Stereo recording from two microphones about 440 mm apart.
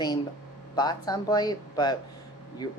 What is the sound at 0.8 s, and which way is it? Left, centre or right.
Speech, centre.